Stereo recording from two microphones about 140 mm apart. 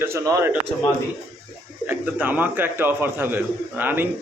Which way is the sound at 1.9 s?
10° right (ahead or behind).